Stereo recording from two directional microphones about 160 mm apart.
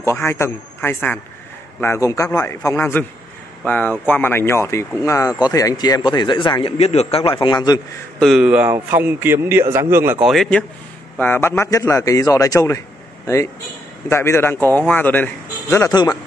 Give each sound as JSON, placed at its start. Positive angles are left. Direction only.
{"t": 0.0, "sound": "speech", "side_deg": 15}
{"t": 8.2, "sound": "a man's voice", "side_deg": -5}
{"t": 10.2, "sound": "speech", "side_deg": 0}
{"t": 11.1, "sound": "speech", "side_deg": 15}
{"t": 14.0, "sound": "speech", "side_deg": 15}